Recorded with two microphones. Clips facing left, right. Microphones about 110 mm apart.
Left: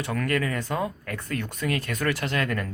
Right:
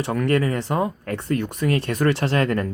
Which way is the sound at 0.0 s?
25° right (ahead or behind).